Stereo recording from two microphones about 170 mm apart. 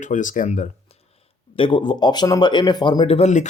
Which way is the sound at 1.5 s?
30° left (ahead or behind).